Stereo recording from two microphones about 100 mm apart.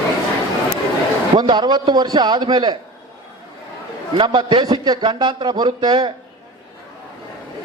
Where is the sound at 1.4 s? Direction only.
45° right (ahead or behind).